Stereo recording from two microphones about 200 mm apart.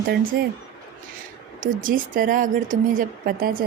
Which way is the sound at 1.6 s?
45° right (ahead or behind).